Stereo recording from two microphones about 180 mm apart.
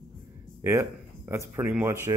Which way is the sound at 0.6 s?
15° right (ahead or behind).